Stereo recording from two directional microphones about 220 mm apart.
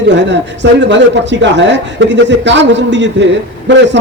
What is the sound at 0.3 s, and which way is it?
A man's voice, 55° right (ahead or behind).